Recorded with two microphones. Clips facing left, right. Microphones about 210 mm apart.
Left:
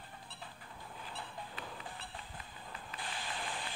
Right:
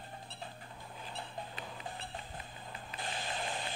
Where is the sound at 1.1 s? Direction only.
25° right (ahead or behind).